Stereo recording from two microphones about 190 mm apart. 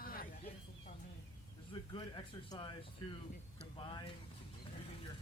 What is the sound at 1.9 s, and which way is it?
Speech, 20° left (ahead or behind).